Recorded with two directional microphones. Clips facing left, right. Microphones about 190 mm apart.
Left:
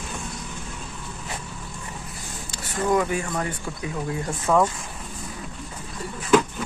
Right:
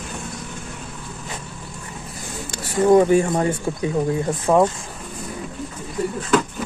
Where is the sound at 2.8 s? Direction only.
35° right (ahead or behind).